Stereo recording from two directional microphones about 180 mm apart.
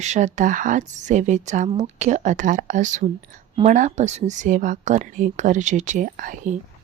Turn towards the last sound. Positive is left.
turn(degrees=-45)  # may be behind; listen again after turning